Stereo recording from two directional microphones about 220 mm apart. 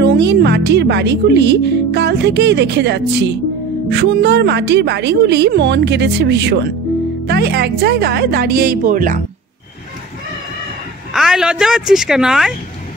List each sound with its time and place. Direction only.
0.0 s speech: 50° right (ahead or behind)
11.1 s speech: centre (ahead or behind)